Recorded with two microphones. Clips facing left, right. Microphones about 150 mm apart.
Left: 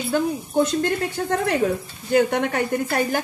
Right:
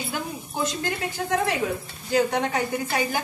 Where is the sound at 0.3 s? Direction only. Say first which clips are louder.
Left 8 dB; 60° left (ahead or behind).